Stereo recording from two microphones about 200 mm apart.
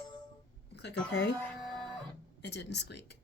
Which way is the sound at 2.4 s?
60° left (ahead or behind).